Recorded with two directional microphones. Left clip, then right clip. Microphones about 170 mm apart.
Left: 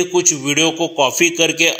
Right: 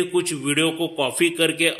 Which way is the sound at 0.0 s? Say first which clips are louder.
Left 6 dB; 10° left (ahead or behind).